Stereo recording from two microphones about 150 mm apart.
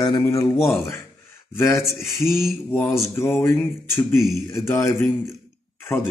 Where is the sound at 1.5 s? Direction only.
20° left (ahead or behind).